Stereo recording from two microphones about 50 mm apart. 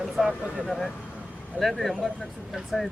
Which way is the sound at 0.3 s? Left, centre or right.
Right.